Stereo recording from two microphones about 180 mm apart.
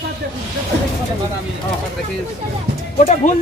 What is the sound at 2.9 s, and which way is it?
Speech, 45° left (ahead or behind).